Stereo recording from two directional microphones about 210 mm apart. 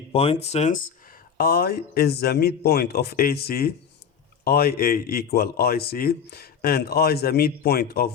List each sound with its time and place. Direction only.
0.1 s speech: 25° left (ahead or behind); by 8.1 s 45° left (ahead or behind)